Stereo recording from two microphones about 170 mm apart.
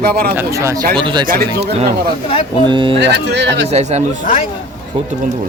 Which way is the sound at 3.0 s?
90° right.